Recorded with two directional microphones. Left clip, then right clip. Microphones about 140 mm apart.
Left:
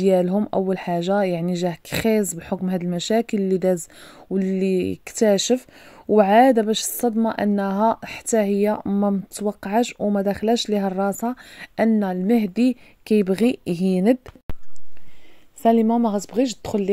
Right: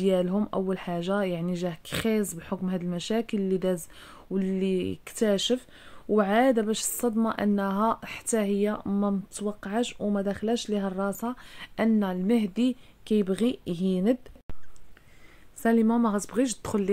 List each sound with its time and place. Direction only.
0.0 s a woman's voice: 35° left (ahead or behind)
15.6 s a woman's voice: 20° left (ahead or behind)